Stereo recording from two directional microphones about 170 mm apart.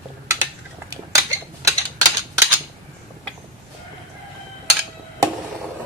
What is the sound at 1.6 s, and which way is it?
Typing, 20° right (ahead or behind).